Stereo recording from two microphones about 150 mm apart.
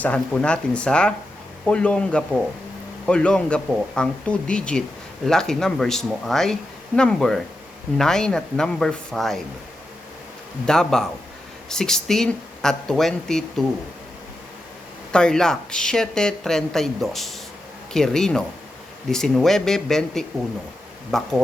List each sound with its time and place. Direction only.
0.0 s speech: 10° left (ahead or behind)
10.7 s speech: 5° left (ahead or behind)
15.1 s speech: 5° left (ahead or behind)